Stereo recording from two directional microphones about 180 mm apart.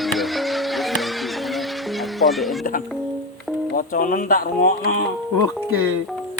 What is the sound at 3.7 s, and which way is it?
Speech, 50° left (ahead or behind).